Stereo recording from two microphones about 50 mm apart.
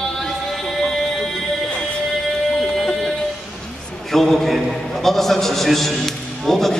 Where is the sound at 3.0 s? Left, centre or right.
Centre.